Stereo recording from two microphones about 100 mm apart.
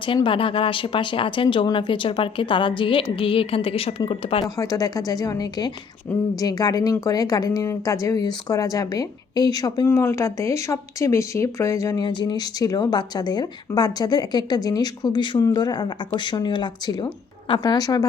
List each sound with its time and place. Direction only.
0.0 s a woman's voice: 60° left (ahead or behind)
4.4 s speech: 35° left (ahead or behind)
9.8 s speech: 25° left (ahead or behind)
12.0 s a woman's voice: 45° left (ahead or behind)
15.4 s a woman's voice: 40° left (ahead or behind)